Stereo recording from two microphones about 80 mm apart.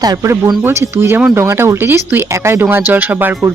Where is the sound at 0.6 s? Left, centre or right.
Right.